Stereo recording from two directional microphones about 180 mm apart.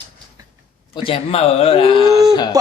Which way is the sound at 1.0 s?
30° left (ahead or behind).